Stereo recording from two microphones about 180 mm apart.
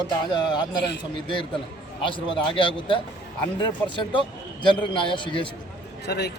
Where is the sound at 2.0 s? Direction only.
30° left (ahead or behind).